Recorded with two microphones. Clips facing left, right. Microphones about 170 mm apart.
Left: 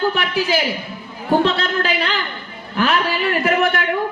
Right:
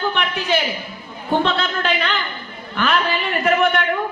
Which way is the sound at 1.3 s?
35° left (ahead or behind).